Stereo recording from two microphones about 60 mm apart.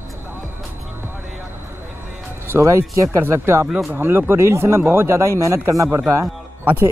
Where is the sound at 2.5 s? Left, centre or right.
Right.